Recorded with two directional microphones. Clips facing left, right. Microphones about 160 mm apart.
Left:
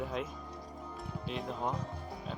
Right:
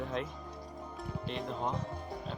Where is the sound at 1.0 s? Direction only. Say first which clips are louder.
Right 1 dB; centre (ahead or behind).